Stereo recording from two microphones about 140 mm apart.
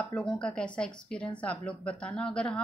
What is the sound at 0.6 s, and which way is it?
A woman's voice, 5° left (ahead or behind).